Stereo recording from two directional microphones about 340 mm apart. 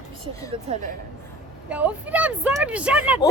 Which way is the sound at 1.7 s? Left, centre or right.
Centre.